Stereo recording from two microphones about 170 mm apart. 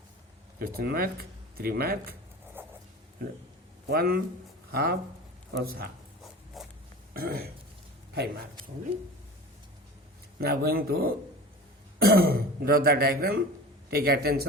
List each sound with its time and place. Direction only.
0.6 s speech: 60° right (ahead or behind)
2.6 s a sound: 10° right (ahead or behind)
3.8 s speech: 65° right (ahead or behind)
6.5 s pig: centre (ahead or behind)
7.1 s throat clearing: 60° right (ahead or behind)
10.3 s speech: 65° right (ahead or behind)